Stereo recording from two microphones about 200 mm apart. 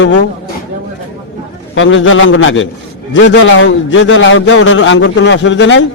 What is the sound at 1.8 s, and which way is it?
A man's voice, 75° left (ahead or behind).